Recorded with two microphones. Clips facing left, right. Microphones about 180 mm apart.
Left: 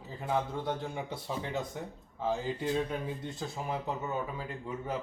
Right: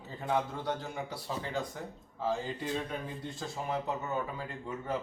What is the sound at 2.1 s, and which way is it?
Speech, centre (ahead or behind).